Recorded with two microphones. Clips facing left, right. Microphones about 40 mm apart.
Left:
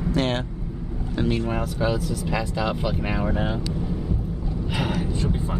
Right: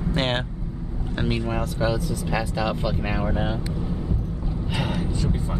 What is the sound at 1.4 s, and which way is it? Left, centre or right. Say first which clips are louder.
Speech: even; centre.